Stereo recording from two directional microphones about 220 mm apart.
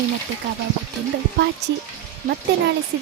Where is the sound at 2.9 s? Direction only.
50° right (ahead or behind).